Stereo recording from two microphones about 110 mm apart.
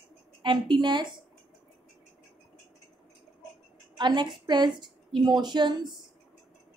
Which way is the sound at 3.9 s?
45° right (ahead or behind).